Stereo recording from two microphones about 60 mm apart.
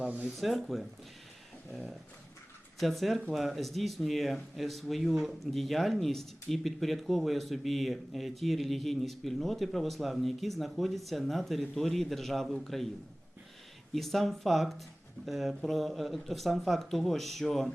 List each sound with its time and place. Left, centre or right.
0.0 s speech: right
0.3 s speech: centre
13.9 s speech: centre